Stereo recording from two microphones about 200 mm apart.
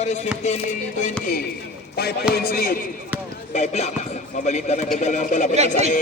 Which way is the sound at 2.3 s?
50° left (ahead or behind).